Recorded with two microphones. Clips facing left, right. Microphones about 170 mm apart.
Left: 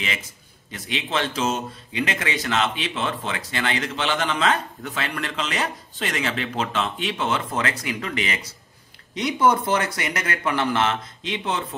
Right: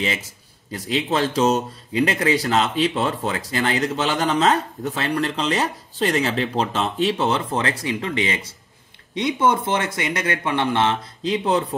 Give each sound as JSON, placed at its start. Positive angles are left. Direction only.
{"t": 0.7, "sound": "speech", "side_deg": -40}